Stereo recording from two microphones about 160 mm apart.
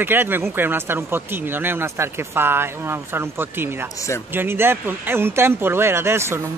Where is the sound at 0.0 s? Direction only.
10° right (ahead or behind).